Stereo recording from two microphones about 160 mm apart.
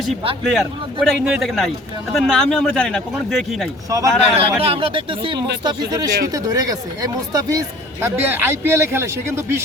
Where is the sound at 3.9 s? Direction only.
20° right (ahead or behind).